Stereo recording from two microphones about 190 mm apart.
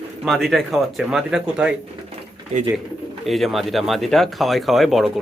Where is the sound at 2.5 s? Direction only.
35° right (ahead or behind).